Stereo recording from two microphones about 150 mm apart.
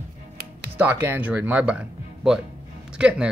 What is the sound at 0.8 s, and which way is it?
Speech, 15° right (ahead or behind).